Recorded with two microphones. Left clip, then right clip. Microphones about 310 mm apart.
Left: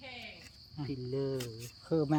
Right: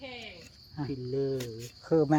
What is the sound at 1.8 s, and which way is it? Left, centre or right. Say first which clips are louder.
Speech: right 6 dB; centre.